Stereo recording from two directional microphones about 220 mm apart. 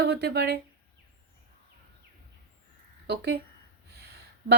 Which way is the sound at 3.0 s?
50° right (ahead or behind).